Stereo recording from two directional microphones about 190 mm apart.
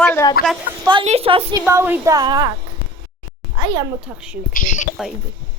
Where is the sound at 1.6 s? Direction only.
15° right (ahead or behind).